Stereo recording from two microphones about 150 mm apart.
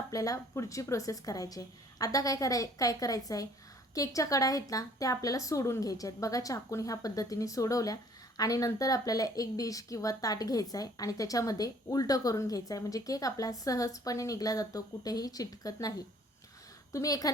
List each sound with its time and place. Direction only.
0.1 s a woman's voice: 20° left (ahead or behind)
16.9 s a woman's voice: 25° left (ahead or behind)